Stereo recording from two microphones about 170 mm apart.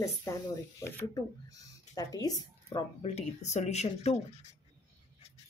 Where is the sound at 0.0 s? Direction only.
20° left (ahead or behind).